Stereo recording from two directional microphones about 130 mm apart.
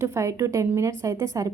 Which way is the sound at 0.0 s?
25° right (ahead or behind).